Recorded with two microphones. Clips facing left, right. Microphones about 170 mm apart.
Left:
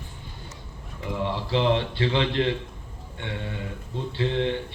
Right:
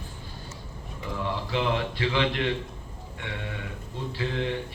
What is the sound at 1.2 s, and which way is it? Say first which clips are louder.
A man's voice: left 4 dB; 30° left (ahead or behind).